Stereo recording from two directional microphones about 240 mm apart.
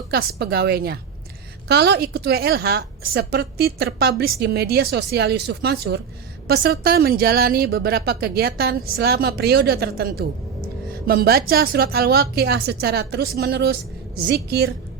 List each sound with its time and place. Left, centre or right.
0.1 s a woman's voice: right